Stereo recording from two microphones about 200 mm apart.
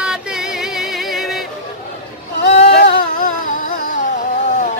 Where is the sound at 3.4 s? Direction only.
45° left (ahead or behind).